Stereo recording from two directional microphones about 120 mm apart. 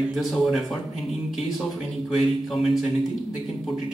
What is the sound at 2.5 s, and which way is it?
Speech, 5° right (ahead or behind).